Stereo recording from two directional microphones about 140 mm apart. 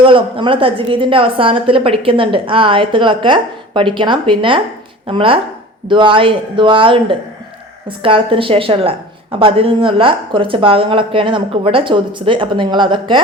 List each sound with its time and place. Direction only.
0.0 s a woman's voice: 35° right (ahead or behind)